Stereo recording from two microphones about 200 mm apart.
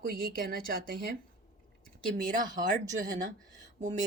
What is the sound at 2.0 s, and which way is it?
Speech, 40° right (ahead or behind).